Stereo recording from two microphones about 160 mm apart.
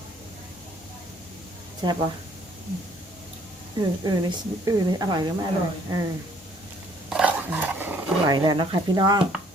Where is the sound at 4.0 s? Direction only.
25° right (ahead or behind).